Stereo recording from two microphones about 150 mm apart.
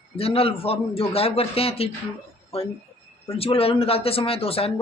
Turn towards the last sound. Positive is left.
turn(degrees=40)  # may be behind; listen again after turning